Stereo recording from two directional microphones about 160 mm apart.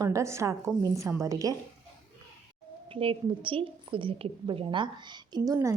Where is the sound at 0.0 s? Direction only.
20° right (ahead or behind).